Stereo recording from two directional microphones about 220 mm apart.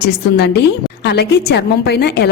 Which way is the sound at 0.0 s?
45° left (ahead or behind).